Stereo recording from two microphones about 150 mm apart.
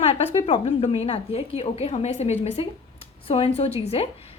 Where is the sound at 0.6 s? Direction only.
45° left (ahead or behind).